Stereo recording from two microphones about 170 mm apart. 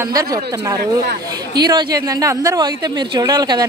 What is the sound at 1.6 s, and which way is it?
Speech, 25° right (ahead or behind).